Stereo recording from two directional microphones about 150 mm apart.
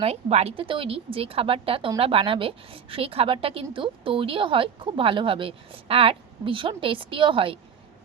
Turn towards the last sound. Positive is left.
turn(degrees=-35)  # may be behind; listen again after turning